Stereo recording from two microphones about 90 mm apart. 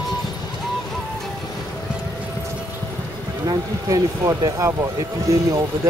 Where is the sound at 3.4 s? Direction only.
40° right (ahead or behind).